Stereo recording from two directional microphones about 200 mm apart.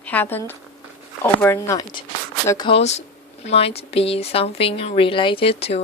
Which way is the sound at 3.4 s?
30° left (ahead or behind).